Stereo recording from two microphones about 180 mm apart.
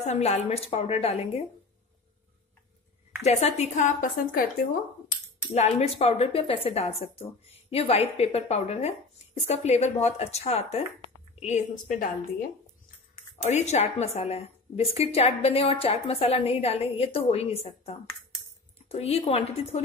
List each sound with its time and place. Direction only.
0.0 s a woman's voice: 35° left (ahead or behind)
3.2 s a woman's voice: 35° left (ahead or behind)
5.5 s a woman's voice: 35° left (ahead or behind)
13.5 s a woman's voice: 40° left (ahead or behind)
18.8 s a woman's voice: 35° left (ahead or behind)